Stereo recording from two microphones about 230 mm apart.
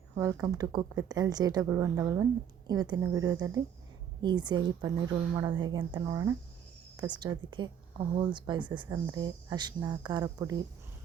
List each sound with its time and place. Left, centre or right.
0.2 s a woman's voice: centre